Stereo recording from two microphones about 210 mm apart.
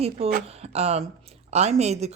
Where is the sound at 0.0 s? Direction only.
30° right (ahead or behind).